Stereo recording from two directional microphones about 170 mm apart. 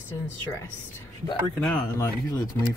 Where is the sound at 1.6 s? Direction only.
10° left (ahead or behind).